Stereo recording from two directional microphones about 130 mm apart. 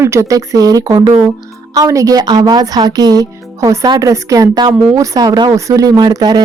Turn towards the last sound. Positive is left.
turn(degrees=-30)  # may be behind; listen again after turning